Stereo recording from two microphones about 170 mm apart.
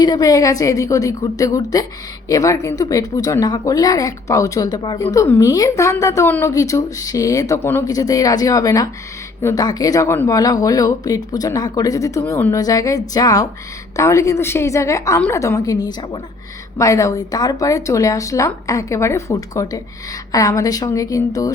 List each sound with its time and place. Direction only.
0.0 s a woman's voice: 20° left (ahead or behind)